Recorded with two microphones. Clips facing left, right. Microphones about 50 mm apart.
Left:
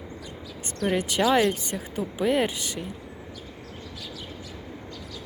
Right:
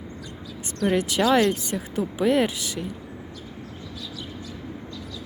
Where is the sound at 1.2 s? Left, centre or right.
Centre.